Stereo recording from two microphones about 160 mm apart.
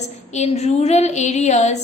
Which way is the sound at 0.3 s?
45° left (ahead or behind).